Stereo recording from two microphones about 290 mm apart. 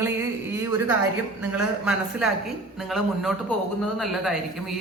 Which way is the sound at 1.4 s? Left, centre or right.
Centre.